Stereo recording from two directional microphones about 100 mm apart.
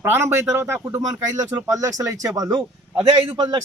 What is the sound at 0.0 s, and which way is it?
Speech, 25° right (ahead or behind).